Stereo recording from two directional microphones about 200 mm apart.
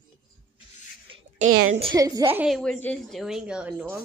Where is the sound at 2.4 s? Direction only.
Centre (ahead or behind).